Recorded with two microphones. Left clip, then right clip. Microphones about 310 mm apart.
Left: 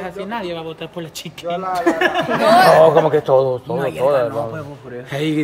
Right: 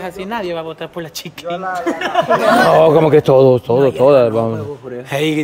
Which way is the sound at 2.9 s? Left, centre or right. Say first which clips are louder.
Right 3 dB; right.